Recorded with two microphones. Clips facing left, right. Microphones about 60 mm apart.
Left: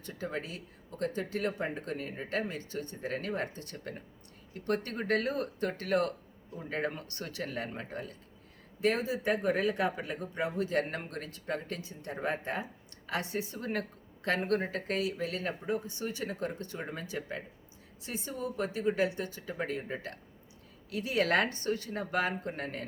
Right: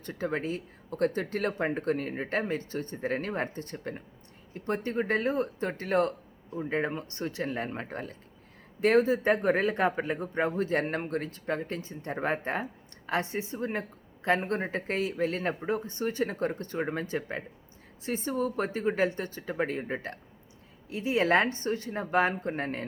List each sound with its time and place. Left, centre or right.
0.0 s speech: right